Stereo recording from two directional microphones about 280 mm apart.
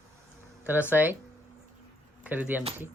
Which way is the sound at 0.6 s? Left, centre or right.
Centre.